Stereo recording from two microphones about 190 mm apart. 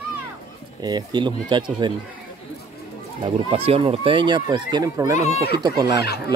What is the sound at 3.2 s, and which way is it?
Speech, 30° right (ahead or behind).